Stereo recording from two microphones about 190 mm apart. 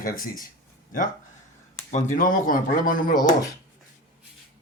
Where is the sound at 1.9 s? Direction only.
40° left (ahead or behind).